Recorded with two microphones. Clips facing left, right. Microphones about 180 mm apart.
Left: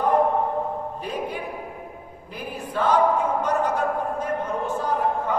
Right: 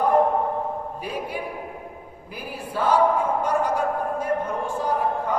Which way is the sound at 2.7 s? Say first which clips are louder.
Even; 10° right (ahead or behind).